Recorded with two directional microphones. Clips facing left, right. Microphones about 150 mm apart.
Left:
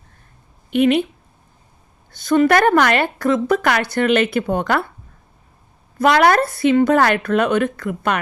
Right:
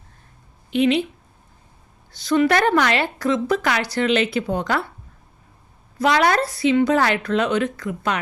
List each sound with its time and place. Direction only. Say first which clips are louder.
0.7 s a woman's voice: left 3 dB; 55° left (ahead or behind)
2.0 s a woman's voice: left 3 dB; 50° left (ahead or behind)
6.0 s a woman's voice: left 4 dB; 55° left (ahead or behind)